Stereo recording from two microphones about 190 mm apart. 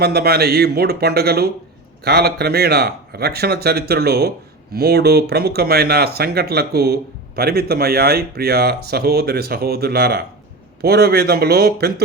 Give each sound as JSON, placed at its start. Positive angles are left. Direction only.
{"t": 0.0, "sound": "speech", "side_deg": -55}